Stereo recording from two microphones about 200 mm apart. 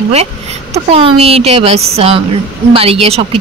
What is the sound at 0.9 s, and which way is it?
A woman's voice, 30° right (ahead or behind).